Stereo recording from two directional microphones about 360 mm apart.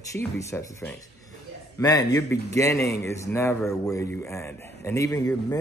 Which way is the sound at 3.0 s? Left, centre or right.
Centre.